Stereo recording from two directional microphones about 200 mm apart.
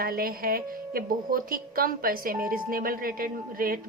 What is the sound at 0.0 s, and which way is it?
A woman's voice, 45° right (ahead or behind).